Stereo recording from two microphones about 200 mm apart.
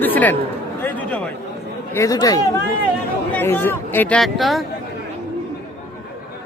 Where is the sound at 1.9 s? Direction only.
15° left (ahead or behind); by 4.6 s centre (ahead or behind).